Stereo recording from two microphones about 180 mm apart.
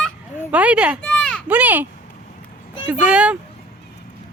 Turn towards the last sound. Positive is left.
turn(degrees=-5)  # may be behind; listen again after turning